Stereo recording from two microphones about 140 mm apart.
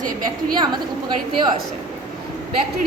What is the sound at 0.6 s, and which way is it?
Speech, 30° right (ahead or behind).